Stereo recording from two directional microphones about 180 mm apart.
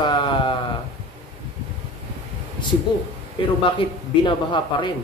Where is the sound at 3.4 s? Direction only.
30° left (ahead or behind).